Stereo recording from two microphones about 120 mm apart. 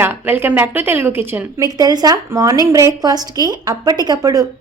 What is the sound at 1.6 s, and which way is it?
A woman's voice, 35° right (ahead or behind).